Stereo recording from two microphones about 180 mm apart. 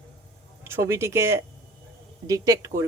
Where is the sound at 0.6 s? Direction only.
15° right (ahead or behind).